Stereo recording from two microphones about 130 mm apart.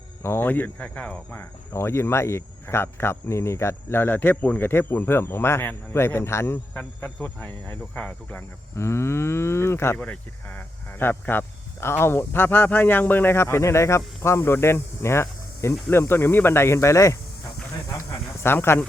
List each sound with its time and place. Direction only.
0.2 s speech: 20° left (ahead or behind)
18.4 s speech: 15° left (ahead or behind)